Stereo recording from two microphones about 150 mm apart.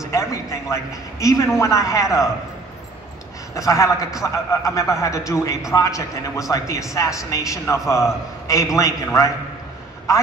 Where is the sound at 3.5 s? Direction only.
20° left (ahead or behind).